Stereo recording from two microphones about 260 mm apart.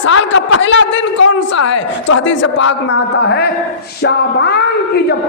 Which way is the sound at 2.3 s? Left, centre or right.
Left.